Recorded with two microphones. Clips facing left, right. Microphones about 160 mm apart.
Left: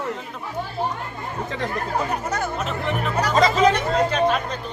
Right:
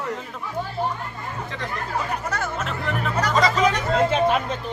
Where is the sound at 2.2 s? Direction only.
20° left (ahead or behind).